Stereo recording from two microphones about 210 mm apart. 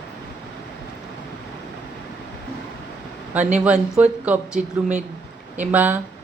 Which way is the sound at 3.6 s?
5° right (ahead or behind).